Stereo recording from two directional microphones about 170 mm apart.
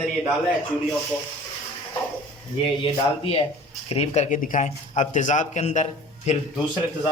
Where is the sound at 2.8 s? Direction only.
30° left (ahead or behind).